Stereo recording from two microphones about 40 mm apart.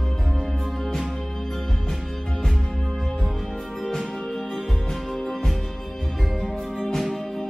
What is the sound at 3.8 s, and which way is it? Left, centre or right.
Music, centre.